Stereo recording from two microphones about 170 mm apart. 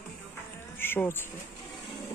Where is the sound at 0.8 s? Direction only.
10° left (ahead or behind).